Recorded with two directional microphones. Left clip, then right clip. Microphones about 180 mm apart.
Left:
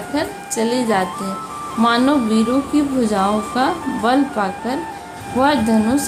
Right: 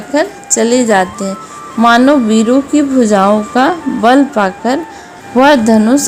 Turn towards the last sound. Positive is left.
turn(degrees=-40)  # may be behind; listen again after turning